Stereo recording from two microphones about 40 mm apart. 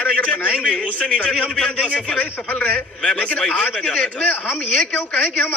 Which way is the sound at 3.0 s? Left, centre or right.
Left.